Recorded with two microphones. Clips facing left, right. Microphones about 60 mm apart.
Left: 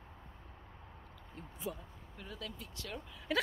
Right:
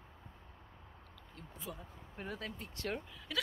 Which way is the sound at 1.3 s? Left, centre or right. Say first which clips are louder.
Left 5 dB; centre.